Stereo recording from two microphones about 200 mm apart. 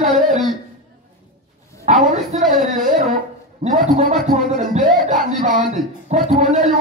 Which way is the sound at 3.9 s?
45° right (ahead or behind).